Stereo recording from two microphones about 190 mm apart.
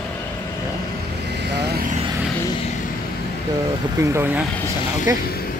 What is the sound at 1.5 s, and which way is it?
Vehicle, 60° right (ahead or behind).